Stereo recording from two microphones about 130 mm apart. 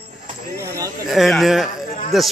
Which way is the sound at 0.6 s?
20° right (ahead or behind).